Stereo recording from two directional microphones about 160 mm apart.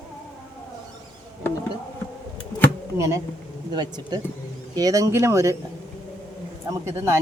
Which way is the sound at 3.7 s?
25° right (ahead or behind).